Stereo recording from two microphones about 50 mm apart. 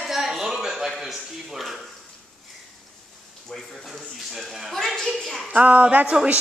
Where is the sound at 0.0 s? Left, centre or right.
Centre.